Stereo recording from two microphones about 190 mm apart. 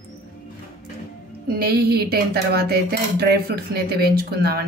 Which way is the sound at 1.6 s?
55° right (ahead or behind).